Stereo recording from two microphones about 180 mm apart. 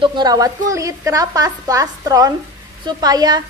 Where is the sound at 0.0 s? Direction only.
25° right (ahead or behind).